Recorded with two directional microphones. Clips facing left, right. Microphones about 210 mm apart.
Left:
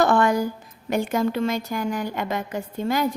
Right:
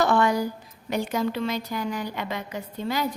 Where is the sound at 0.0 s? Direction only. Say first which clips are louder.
Left 2 dB; 50° left (ahead or behind).